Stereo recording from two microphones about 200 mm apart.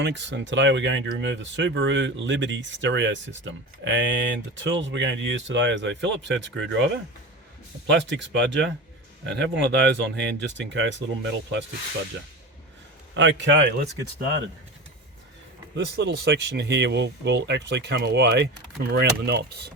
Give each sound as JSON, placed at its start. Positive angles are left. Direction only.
{"t": 0.0, "sound": "speech", "side_deg": -60}
{"t": 7.9, "sound": "speech", "side_deg": -60}
{"t": 13.1, "sound": "speech", "side_deg": -65}
{"t": 15.7, "sound": "speech", "side_deg": -60}